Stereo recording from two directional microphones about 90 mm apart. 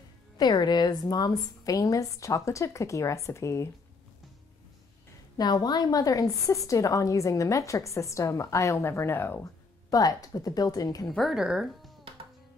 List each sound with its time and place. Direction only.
0.4 s a woman's voice: 50° left (ahead or behind); by 3.7 s 35° left (ahead or behind)
5.4 s a woman's voice: 50° left (ahead or behind); by 9.5 s 25° left (ahead or behind)
9.8 s speech: 40° left (ahead or behind)
11.1 s speech: centre (ahead or behind)